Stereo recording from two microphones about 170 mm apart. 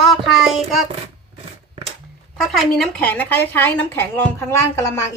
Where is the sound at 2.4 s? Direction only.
Centre (ahead or behind).